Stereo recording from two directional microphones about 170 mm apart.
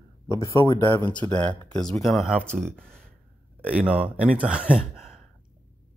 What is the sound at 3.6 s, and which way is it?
Speech, 5° right (ahead or behind).